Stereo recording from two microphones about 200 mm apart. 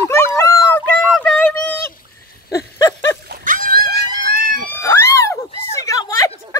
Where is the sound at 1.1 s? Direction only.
Centre (ahead or behind).